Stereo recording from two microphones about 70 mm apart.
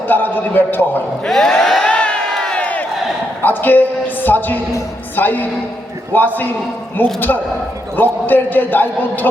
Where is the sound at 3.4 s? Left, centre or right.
Left.